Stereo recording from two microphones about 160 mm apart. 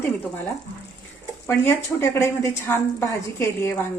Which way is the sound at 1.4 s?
15° left (ahead or behind).